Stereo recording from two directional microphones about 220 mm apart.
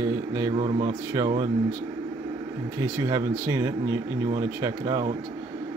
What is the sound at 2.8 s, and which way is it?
Speech, 15° right (ahead or behind).